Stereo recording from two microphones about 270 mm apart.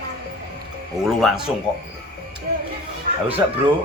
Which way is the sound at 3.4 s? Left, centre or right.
Centre.